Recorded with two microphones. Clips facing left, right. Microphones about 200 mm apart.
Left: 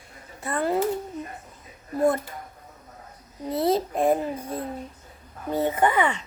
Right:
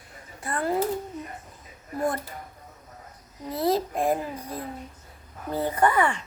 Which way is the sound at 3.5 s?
25° left (ahead or behind).